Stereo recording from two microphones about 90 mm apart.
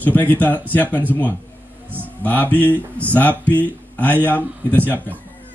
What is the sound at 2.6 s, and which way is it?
Speech, 20° left (ahead or behind).